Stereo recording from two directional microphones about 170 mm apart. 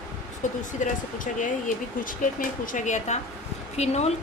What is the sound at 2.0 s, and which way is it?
A woman's voice, 55° left (ahead or behind).